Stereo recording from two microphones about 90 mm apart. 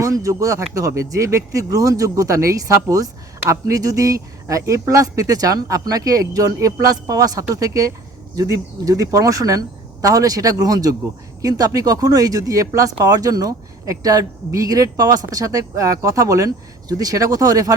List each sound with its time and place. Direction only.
0.0 s speech: 35° right (ahead or behind)